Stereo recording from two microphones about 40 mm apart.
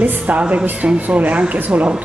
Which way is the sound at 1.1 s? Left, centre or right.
Right.